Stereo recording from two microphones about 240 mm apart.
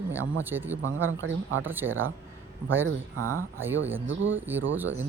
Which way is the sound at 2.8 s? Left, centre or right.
Right.